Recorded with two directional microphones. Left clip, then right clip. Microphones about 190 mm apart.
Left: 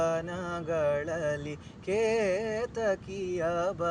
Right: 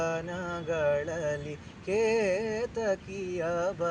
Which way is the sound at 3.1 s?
60° left (ahead or behind).